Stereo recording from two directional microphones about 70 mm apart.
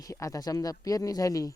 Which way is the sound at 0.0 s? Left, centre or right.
Left.